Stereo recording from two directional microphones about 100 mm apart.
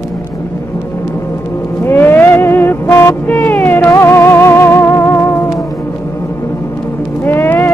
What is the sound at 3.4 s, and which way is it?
Music, 20° left (ahead or behind).